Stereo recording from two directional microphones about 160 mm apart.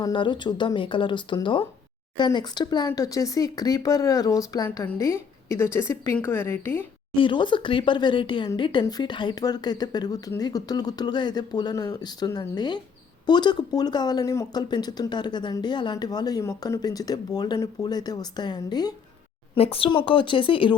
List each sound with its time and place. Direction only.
0.0 s a woman's voice: 30° left (ahead or behind)
7.2 s speech: 30° left (ahead or behind)
19.5 s a woman's voice: 35° left (ahead or behind)